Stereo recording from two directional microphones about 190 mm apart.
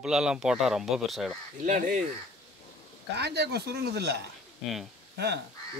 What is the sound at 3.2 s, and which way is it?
A man's voice, 60° right (ahead or behind).